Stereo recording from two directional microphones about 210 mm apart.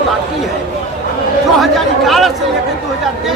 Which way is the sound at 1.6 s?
Centre (ahead or behind).